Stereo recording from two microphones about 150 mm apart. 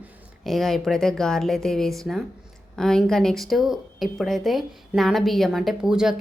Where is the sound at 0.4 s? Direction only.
Centre (ahead or behind).